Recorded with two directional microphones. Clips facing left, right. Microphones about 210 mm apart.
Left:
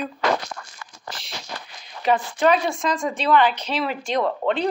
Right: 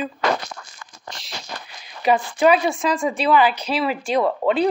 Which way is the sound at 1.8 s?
10° right (ahead or behind).